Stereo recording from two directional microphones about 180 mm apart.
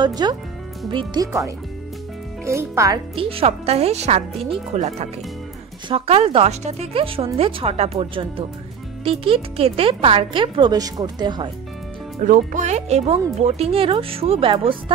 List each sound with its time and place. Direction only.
0.0 s speech: 25° right (ahead or behind)
3.2 s speech: 30° right (ahead or behind)
12.2 s speech: 45° right (ahead or behind)